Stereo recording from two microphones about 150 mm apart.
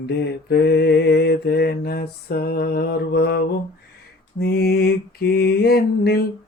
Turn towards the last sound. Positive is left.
turn(degrees=90)